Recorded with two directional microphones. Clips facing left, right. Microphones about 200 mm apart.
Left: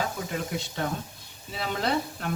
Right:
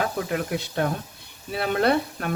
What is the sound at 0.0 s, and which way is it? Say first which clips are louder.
A woman's voice: right 5 dB; 60° right (ahead or behind).